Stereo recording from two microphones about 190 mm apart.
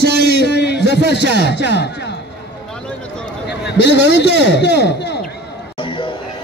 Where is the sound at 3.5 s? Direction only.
65° left (ahead or behind).